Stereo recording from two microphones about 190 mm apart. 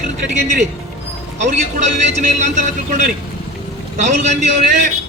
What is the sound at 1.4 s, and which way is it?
A man's voice, 40° right (ahead or behind).